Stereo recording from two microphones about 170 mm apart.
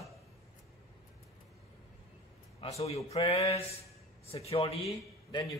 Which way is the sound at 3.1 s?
40° left (ahead or behind).